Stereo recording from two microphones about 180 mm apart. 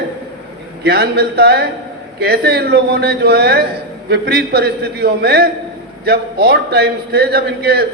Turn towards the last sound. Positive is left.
turn(degrees=-60)  # may be behind; listen again after turning